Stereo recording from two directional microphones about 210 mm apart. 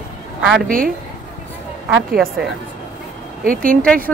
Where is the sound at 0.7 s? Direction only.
40° right (ahead or behind).